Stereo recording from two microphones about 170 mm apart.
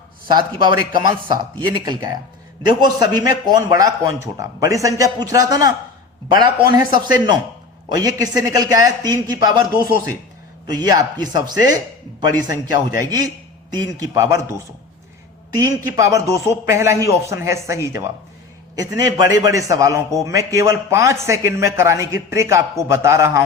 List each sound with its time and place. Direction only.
0.3 s a man's voice: 25° right (ahead or behind)
10.7 s a man's voice: 20° right (ahead or behind)
15.5 s a man's voice: 20° right (ahead or behind)